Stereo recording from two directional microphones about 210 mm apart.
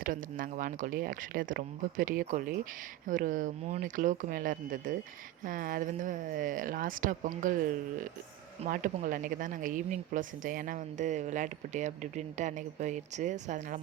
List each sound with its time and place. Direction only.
0.0 s speech: 40° right (ahead or behind)